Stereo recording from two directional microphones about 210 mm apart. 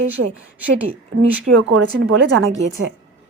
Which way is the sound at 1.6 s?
75° right (ahead or behind).